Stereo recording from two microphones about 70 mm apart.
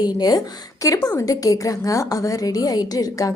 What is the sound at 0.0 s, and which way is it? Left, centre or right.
A woman's voice, left.